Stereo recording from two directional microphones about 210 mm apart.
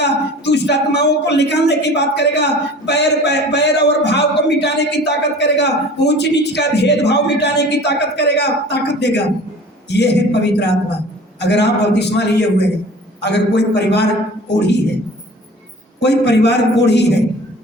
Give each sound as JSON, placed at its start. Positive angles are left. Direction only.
{"t": 0.0, "sound": "speech", "side_deg": 55}
{"t": 16.0, "sound": "speech", "side_deg": 55}